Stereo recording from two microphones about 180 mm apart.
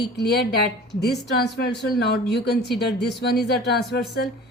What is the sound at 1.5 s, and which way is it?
A woman's voice, 65° left (ahead or behind).